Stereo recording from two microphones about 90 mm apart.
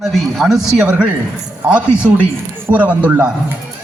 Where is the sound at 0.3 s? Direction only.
Centre (ahead or behind).